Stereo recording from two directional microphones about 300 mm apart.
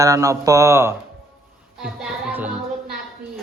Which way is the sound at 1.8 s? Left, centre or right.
Centre.